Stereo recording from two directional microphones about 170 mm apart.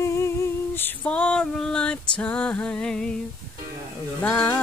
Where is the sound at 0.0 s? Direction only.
15° left (ahead or behind).